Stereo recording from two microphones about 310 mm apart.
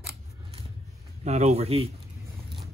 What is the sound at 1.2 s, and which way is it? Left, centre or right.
Speech, right.